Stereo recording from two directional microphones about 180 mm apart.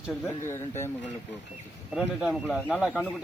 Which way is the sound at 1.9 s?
5° right (ahead or behind).